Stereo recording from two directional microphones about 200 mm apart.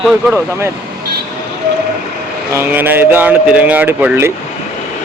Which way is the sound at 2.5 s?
10° right (ahead or behind).